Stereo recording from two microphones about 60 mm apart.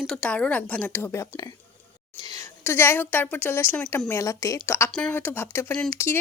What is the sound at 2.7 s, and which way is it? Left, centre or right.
A woman's voice, left.